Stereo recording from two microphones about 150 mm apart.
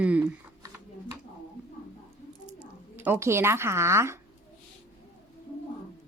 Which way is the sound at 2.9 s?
15° right (ahead or behind).